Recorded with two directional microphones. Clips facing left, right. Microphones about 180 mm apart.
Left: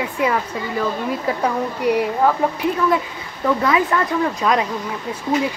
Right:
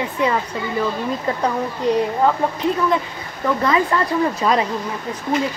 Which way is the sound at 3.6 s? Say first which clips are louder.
Right 2 dB; 5° left (ahead or behind).